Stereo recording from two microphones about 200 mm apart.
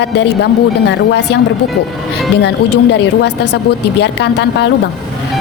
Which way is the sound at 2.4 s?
55° left (ahead or behind).